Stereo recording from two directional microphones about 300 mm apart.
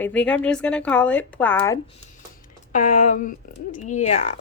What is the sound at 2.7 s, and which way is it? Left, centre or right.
Speech, left.